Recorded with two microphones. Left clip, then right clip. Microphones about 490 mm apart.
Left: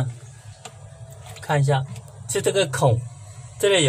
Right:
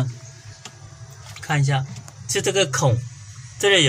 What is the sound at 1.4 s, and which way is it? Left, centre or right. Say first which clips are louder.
Speech: left 2 dB; left.